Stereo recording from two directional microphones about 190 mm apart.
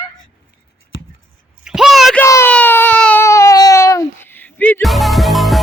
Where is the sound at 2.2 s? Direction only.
15° left (ahead or behind).